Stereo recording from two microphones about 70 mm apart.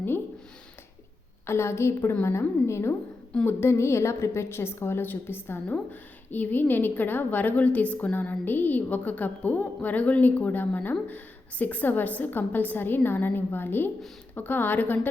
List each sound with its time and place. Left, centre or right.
1.5 s a woman's voice: left